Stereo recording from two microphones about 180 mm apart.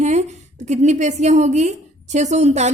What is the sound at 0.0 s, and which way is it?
A woman's voice, 40° right (ahead or behind).